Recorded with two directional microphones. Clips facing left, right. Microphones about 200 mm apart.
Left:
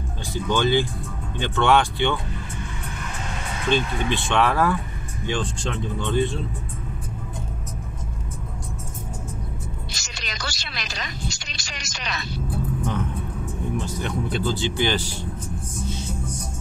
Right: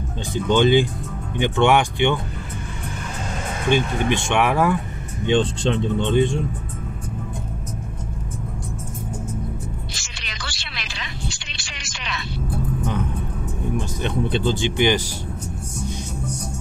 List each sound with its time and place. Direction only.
0.3 s speech: 20° right (ahead or behind)
4.1 s speech: 15° right (ahead or behind)
9.9 s a sound: 40° left (ahead or behind)
14.0 s speech: 25° right (ahead or behind)